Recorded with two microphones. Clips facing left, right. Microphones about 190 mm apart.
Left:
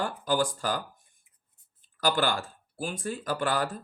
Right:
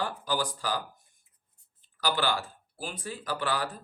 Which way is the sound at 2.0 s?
45° left (ahead or behind).